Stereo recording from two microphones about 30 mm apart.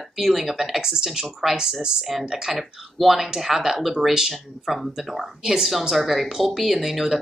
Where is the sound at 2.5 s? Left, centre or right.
Centre.